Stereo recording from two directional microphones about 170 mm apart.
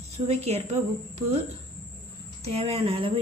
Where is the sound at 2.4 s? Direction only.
35° right (ahead or behind).